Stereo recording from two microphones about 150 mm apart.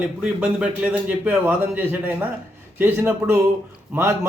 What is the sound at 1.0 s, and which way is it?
A man's voice, 10° right (ahead or behind).